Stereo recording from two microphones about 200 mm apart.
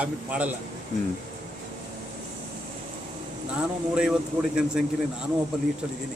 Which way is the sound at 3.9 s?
5° right (ahead or behind).